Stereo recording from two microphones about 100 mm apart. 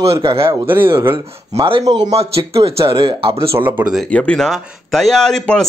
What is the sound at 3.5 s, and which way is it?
Speech, 20° right (ahead or behind).